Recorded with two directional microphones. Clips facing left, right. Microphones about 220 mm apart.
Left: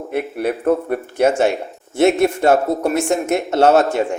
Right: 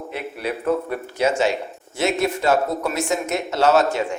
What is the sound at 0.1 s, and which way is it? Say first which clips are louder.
Speech: left 8 dB; 55° left (ahead or behind).